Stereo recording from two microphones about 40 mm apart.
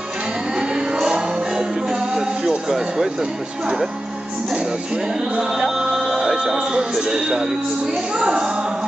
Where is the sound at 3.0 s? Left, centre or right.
Centre.